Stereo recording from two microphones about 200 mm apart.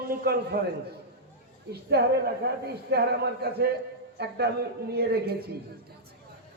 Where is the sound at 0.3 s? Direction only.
50° right (ahead or behind).